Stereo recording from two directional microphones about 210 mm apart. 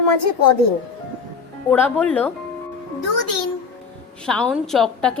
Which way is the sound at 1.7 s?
10° left (ahead or behind).